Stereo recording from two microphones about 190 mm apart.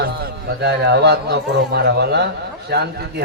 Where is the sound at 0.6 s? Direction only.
60° right (ahead or behind).